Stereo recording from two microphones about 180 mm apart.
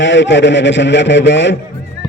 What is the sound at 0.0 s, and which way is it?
A man's voice, 85° left.